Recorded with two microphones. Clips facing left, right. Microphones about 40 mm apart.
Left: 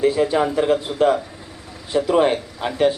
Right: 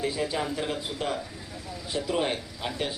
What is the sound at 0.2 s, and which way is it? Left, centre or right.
Speech, left.